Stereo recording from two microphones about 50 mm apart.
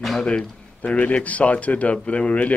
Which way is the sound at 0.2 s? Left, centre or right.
Left.